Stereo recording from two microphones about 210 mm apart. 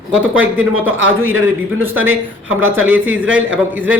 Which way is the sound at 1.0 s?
10° right (ahead or behind).